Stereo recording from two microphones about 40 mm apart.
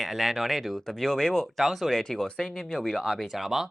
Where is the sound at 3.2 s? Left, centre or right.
Centre.